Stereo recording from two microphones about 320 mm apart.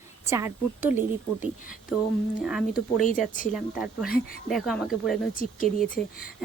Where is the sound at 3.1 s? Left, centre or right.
Left.